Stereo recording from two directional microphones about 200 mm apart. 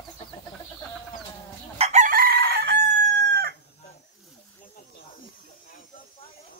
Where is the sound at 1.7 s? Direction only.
35° right (ahead or behind); by 2.8 s 55° right (ahead or behind).